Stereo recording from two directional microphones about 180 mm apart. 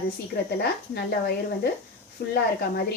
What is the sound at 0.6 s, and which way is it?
Speech, 60° left (ahead or behind).